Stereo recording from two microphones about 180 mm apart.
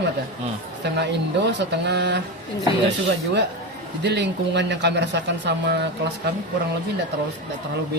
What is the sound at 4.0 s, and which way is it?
Speech, 70° right (ahead or behind).